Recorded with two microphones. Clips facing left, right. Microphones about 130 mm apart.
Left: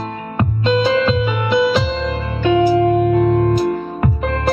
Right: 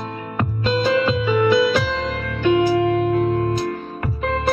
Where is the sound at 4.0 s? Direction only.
85° left.